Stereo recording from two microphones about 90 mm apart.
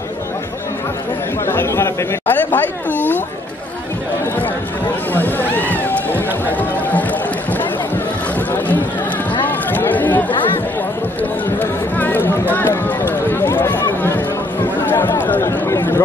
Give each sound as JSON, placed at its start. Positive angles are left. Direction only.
{"t": 1.4, "sound": "speech", "side_deg": 25}
{"t": 5.1, "sound": "run", "side_deg": 20}
{"t": 9.4, "sound": "chatter", "side_deg": 20}
{"t": 11.6, "sound": "a sound", "side_deg": 20}
{"t": 15.1, "sound": "chatter", "side_deg": 20}
{"t": 15.4, "sound": "chatter", "side_deg": 30}